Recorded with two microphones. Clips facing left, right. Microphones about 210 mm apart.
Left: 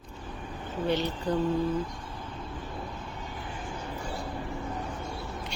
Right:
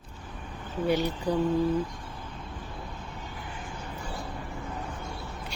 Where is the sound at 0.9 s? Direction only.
10° right (ahead or behind).